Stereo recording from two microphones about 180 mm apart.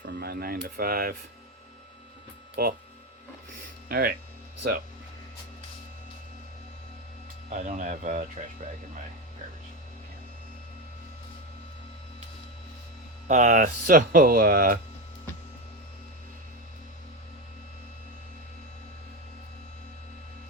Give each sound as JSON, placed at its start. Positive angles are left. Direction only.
{"t": 0.0, "sound": "speech", "side_deg": -60}
{"t": 2.6, "sound": "speech", "side_deg": -60}
{"t": 3.8, "sound": "speech", "side_deg": -55}
{"t": 7.5, "sound": "speech", "side_deg": -45}
{"t": 13.2, "sound": "speech", "side_deg": -45}